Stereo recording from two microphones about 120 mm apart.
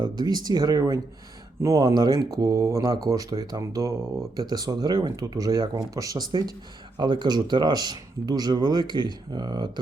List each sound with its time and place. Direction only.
0.0 s speech: 35° right (ahead or behind)